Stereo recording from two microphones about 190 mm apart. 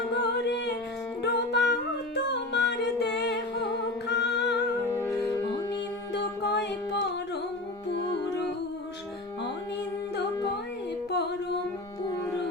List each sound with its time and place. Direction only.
0.1 s music: 65° left (ahead or behind)
4.9 s music: 15° left (ahead or behind)
6.1 s music: 65° left (ahead or behind)